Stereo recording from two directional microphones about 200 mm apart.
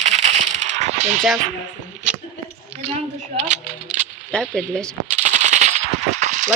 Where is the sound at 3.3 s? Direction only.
35° right (ahead or behind).